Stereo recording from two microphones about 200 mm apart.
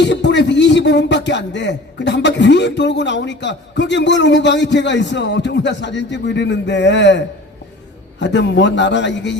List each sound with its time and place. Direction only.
0.0 s speech: 60° left (ahead or behind)